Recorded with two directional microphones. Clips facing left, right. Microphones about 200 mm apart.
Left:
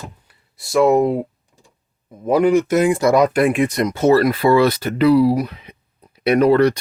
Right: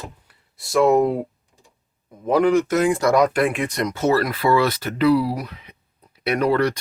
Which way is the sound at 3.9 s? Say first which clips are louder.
Left 6 dB; 30° left (ahead or behind).